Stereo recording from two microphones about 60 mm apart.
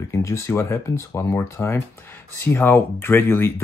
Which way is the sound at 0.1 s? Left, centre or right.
Left.